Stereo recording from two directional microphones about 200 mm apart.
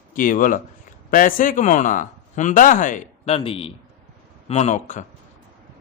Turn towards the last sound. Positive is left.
turn(degrees=40)  # may be behind; listen again after turning